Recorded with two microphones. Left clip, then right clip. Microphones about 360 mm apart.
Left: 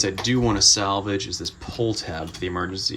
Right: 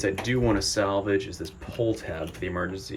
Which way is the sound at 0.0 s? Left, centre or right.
Centre.